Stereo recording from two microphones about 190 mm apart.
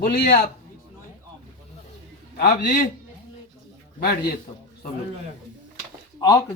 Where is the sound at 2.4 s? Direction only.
55° left (ahead or behind).